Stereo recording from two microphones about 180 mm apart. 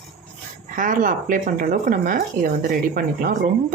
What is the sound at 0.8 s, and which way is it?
A woman's voice, 50° right (ahead or behind).